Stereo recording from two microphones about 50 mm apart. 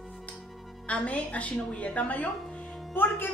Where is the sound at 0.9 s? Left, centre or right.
Left.